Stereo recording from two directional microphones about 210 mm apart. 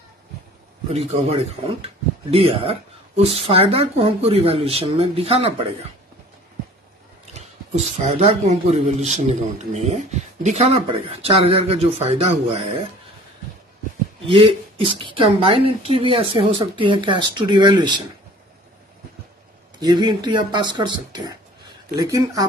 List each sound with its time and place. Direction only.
0.9 s speech: 30° right (ahead or behind)
7.3 s speech: 30° right (ahead or behind)
14.2 s speech: 25° right (ahead or behind)
19.8 s speech: 20° right (ahead or behind)